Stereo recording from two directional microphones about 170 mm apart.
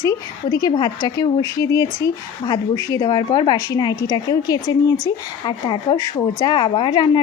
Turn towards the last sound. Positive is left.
turn(degrees=25)  # may be behind; listen again after turning